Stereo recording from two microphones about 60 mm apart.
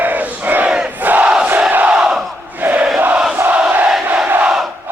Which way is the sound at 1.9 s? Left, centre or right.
Centre.